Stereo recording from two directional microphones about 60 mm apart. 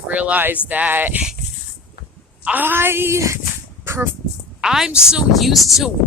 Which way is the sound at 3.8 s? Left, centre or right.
Right.